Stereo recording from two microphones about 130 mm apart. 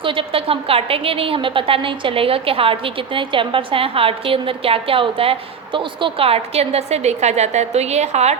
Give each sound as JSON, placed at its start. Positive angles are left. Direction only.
{"t": 0.0, "sound": "a woman's voice", "side_deg": -40}